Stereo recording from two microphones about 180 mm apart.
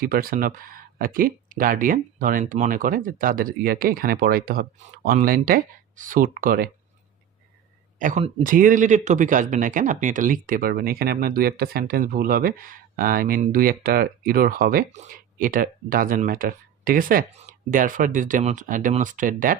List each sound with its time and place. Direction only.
0.0 s speech: 55° right (ahead or behind)
7.9 s speech: 45° right (ahead or behind)